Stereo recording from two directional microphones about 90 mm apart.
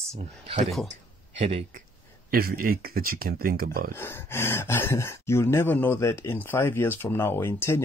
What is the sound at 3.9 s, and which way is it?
Speech, 25° left (ahead or behind).